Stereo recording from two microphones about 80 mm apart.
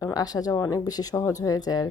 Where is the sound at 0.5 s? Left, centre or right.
Left.